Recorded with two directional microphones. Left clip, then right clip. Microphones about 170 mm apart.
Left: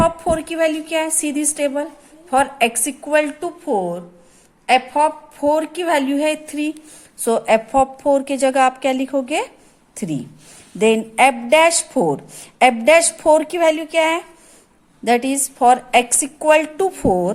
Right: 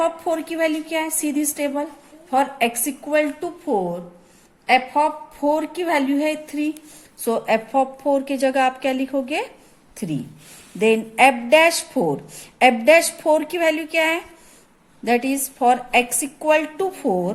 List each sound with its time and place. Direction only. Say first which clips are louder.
0.0 s a woman's voice: left 4 dB; 25° left (ahead or behind)